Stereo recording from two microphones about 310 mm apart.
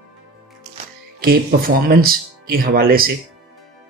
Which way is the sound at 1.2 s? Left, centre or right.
Right.